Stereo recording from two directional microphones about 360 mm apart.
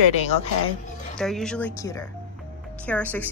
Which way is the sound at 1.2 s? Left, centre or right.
Centre.